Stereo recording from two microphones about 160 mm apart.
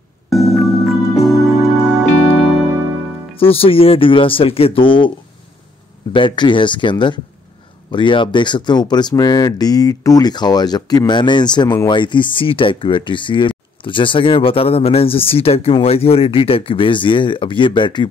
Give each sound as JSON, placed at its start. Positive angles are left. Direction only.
{"t": 0.3, "sound": "music", "side_deg": 0}
{"t": 3.3, "sound": "speech", "side_deg": 35}
{"t": 6.1, "sound": "speech", "side_deg": 30}